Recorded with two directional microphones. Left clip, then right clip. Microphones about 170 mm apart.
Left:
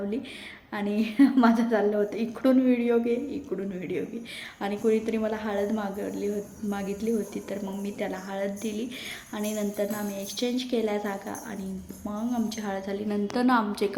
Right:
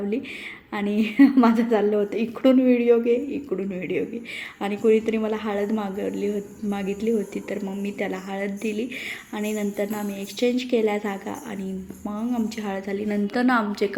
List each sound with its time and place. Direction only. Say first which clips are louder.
0.7 s a woman's voice: right 4 dB; 15° right (ahead or behind)